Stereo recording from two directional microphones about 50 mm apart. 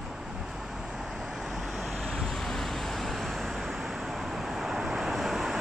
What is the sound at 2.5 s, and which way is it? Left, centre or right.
Vehicle, centre.